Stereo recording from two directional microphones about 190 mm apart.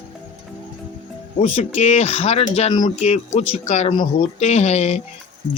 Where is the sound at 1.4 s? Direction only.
35° left (ahead or behind).